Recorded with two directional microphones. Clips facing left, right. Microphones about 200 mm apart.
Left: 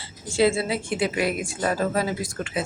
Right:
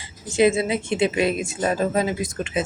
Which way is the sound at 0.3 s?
20° right (ahead or behind).